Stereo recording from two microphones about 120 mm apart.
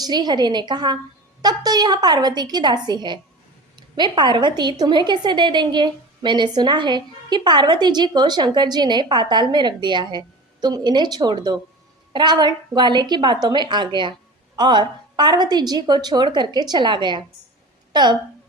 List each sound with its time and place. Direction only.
0.0 s a woman's voice: 35° right (ahead or behind)